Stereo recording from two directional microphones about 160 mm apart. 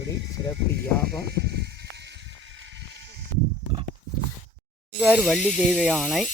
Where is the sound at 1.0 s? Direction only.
90° right.